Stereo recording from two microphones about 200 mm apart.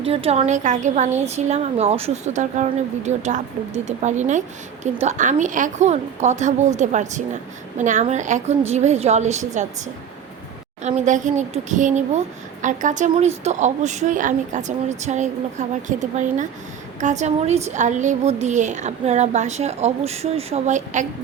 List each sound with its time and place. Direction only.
0.0 s a woman's voice: 30° right (ahead or behind)
10.8 s a woman's voice: 35° right (ahead or behind)